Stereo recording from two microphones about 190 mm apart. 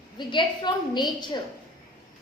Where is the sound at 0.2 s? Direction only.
25° left (ahead or behind).